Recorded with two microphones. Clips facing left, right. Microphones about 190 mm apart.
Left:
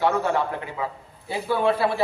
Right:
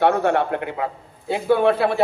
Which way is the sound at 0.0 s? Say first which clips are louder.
Right 4 dB; 65° right (ahead or behind).